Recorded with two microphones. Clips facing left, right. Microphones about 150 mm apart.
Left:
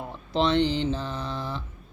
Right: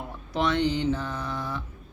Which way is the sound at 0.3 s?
25° left (ahead or behind).